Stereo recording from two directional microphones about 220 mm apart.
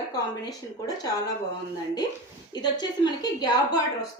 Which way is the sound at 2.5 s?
20° left (ahead or behind).